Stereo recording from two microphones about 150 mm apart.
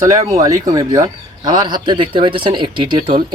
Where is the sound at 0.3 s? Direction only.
25° right (ahead or behind).